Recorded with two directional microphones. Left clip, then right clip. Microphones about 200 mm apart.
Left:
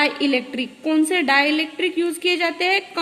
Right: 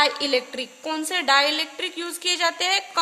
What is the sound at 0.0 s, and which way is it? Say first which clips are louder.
A woman's voice: left 1 dB; 55° right (ahead or behind).